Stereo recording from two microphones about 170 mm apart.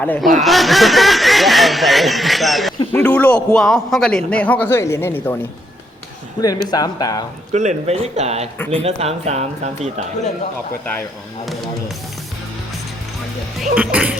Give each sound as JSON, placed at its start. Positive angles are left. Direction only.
{"t": 0.0, "sound": "a man's voice", "side_deg": 5}
{"t": 6.7, "sound": "speech", "side_deg": 20}
{"t": 7.5, "sound": "speech", "side_deg": -45}
{"t": 13.6, "sound": "speech", "side_deg": -5}